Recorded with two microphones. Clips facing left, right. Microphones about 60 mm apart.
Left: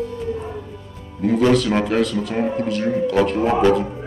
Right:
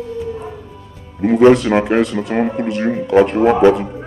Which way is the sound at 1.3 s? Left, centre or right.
Right.